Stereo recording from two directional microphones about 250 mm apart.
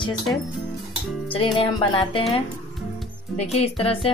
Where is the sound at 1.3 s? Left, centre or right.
Left.